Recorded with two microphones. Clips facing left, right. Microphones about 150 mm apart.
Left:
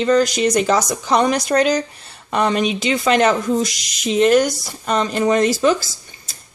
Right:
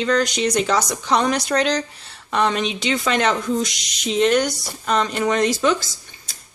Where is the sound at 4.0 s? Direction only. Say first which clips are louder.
Left 4 dB; 5° left (ahead or behind).